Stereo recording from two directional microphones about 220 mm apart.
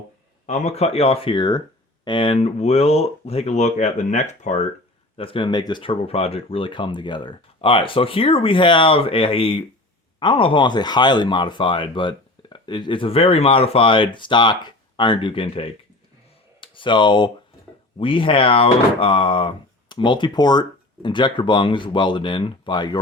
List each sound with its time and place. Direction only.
0.4 s speech: 30° left (ahead or behind)